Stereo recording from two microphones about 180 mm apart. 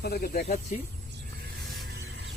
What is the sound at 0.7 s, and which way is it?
Speech, 50° left (ahead or behind).